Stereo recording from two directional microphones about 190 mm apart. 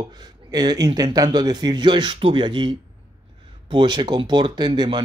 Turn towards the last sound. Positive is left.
turn(degrees=-25)  # may be behind; listen again after turning